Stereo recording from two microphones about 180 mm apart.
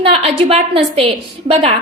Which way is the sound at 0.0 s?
30° right (ahead or behind).